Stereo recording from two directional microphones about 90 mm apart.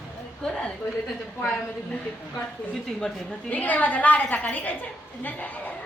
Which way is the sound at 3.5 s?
15° left (ahead or behind).